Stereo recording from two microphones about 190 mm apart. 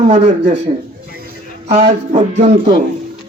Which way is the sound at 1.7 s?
35° right (ahead or behind).